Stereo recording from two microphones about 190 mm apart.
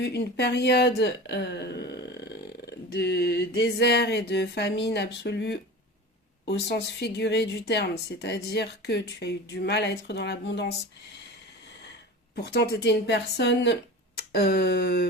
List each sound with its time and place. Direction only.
0.0 s speech: 60° left (ahead or behind)
12.4 s speech: 60° left (ahead or behind)